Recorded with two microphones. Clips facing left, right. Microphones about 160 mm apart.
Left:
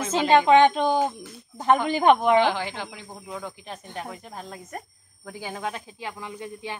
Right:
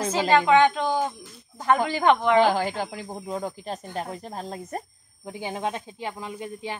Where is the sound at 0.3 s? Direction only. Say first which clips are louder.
Left 2 dB; 20° left (ahead or behind).